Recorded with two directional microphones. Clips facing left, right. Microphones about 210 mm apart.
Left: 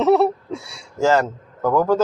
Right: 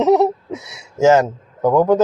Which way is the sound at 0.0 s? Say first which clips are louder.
Right 2 dB; 20° right (ahead or behind).